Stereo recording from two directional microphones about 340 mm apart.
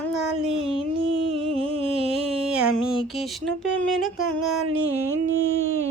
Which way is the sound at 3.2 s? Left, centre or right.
Centre.